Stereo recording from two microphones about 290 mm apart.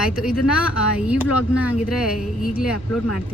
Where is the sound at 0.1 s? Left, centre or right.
Centre.